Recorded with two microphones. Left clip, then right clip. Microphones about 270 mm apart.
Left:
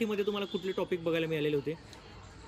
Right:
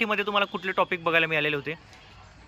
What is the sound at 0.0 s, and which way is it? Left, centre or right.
Speech, centre.